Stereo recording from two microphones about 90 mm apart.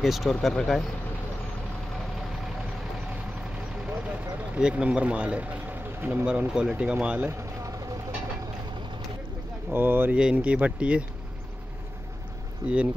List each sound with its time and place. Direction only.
0.0 s speech: centre (ahead or behind)
3.8 s a sound: 10° right (ahead or behind)
6.2 s speech: 15° right (ahead or behind)
7.2 s vehicle: 30° right (ahead or behind)
9.7 s speech: 25° right (ahead or behind)
10.1 s speech: 15° right (ahead or behind)
12.6 s speech: 45° right (ahead or behind)